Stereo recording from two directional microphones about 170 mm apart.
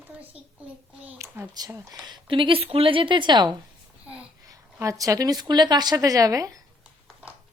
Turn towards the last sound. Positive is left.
turn(degrees=-20)  # may be behind; listen again after turning